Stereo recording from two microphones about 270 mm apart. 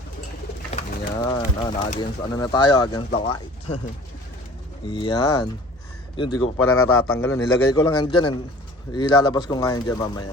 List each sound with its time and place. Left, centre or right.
0.7 s speech: centre
4.9 s speech: centre
6.6 s a man's voice: left
7.7 s speech: centre